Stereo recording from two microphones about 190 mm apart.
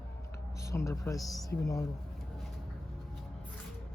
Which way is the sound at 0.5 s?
15° left (ahead or behind).